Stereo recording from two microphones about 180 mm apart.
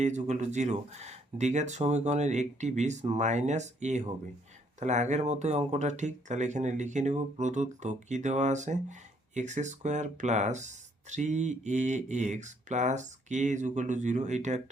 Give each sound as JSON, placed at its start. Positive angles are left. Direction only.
{"t": 0.0, "sound": "speech", "side_deg": -40}